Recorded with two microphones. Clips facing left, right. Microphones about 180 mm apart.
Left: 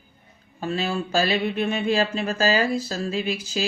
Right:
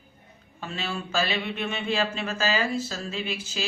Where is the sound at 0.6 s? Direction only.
40° left (ahead or behind).